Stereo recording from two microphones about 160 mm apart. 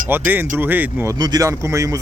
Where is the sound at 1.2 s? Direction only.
20° right (ahead or behind).